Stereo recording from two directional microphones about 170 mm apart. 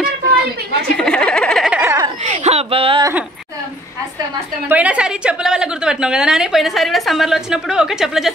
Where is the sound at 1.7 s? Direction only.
15° right (ahead or behind).